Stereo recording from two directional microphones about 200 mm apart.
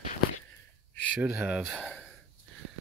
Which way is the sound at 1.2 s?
5° right (ahead or behind).